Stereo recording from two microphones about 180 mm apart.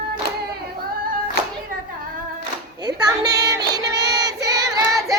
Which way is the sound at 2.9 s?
20° right (ahead or behind).